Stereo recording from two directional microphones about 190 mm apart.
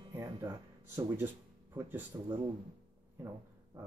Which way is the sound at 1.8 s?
10° right (ahead or behind).